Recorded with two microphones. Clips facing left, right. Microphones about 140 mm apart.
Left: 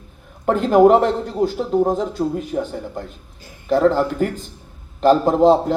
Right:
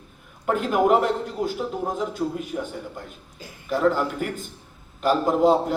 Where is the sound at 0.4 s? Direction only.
35° left (ahead or behind).